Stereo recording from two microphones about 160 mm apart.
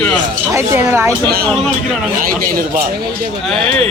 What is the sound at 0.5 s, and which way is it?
Speech, 15° right (ahead or behind).